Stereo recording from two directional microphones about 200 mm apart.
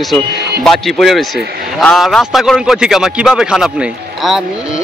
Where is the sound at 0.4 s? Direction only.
55° right (ahead or behind).